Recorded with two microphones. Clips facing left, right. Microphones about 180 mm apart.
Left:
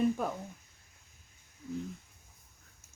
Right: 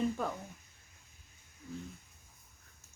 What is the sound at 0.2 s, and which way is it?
Speech, 10° left (ahead or behind).